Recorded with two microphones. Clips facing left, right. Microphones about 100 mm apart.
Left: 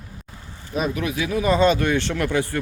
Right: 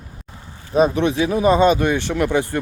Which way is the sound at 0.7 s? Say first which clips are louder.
Right 8 dB; 30° right (ahead or behind).